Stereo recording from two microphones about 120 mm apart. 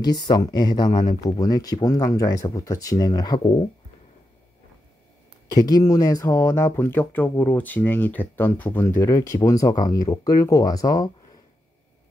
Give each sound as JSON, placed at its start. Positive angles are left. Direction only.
{"t": 0.0, "sound": "speech", "side_deg": 35}
{"t": 5.5, "sound": "speech", "side_deg": 30}